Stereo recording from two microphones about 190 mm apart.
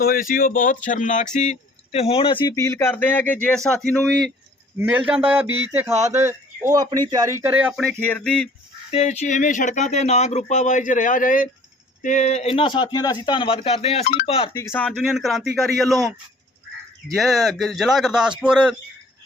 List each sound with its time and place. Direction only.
0.0 s speech: 50° left (ahead or behind); by 8.4 s 5° left (ahead or behind)
8.9 s speech: 35° left (ahead or behind)
14.5 s speech: 15° left (ahead or behind)
17.2 s speech: centre (ahead or behind)